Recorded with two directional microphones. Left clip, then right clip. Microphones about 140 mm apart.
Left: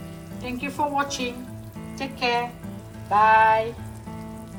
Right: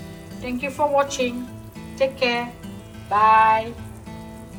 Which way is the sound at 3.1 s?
15° left (ahead or behind).